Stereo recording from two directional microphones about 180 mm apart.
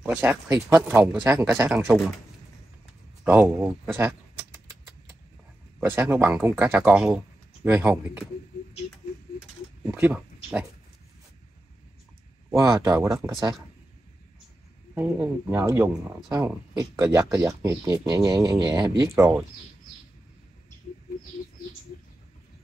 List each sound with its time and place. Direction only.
0.0 s speech: 10° right (ahead or behind)
1.2 s speech: 5° right (ahead or behind)
3.3 s a sound: 10° right (ahead or behind)
5.8 s speech: 10° right (ahead or behind)
9.8 s speech: 10° right (ahead or behind)
12.5 s speech: 20° right (ahead or behind)
15.0 s speech: 10° right (ahead or behind)